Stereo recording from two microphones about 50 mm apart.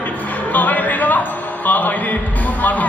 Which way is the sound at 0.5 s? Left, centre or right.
Left.